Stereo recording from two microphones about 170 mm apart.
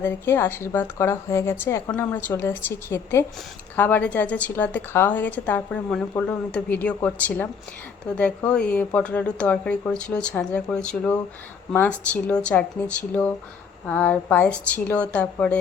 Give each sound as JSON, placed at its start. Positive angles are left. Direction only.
{"t": 0.0, "sound": "a woman's voice", "side_deg": 15}